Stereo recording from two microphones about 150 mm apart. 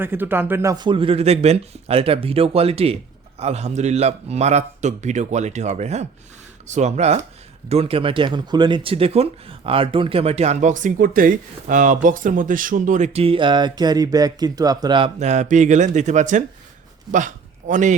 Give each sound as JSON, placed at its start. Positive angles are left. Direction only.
{"t": 0.0, "sound": "speech", "side_deg": -15}
{"t": 0.9, "sound": "speech", "side_deg": -35}
{"t": 15.2, "sound": "a man's voice", "side_deg": -50}